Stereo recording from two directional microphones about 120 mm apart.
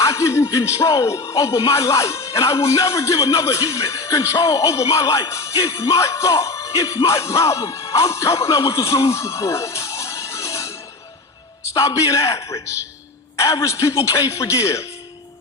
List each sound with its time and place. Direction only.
0.0 s speech: 25° left (ahead or behind)